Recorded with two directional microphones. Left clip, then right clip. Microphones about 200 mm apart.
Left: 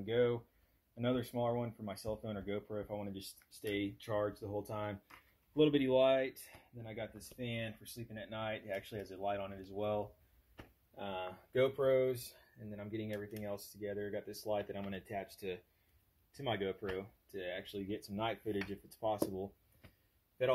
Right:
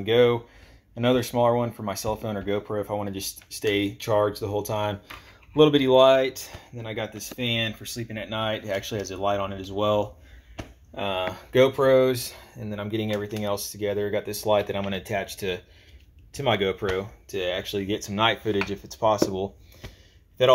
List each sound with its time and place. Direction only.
0.0 s speech: 10° right (ahead or behind)